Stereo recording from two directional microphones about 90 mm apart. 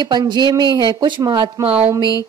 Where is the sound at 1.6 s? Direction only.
90° right.